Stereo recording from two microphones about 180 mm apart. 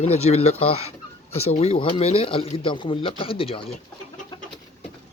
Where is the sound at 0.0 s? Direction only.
35° left (ahead or behind).